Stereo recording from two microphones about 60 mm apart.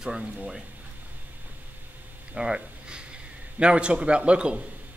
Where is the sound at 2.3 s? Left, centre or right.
Centre.